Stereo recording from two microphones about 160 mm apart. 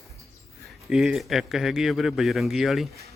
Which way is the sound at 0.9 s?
5° right (ahead or behind).